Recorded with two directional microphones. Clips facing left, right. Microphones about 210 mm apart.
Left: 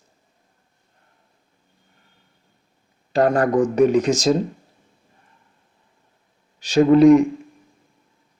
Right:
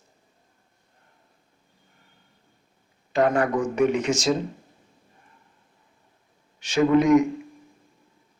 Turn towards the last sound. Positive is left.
turn(degrees=35)  # may be behind; listen again after turning